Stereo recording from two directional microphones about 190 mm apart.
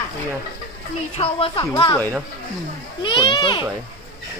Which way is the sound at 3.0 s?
25° left (ahead or behind).